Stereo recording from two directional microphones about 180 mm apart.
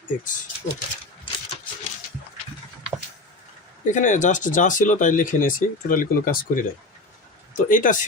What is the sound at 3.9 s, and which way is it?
Speech, 45° left (ahead or behind).